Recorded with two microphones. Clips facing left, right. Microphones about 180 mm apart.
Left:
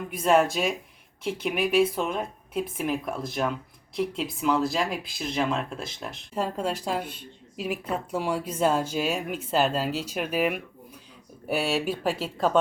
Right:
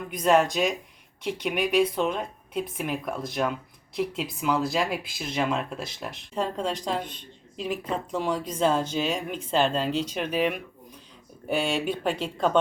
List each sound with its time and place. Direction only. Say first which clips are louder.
0.1 s a woman's voice: even; 5° left (ahead or behind)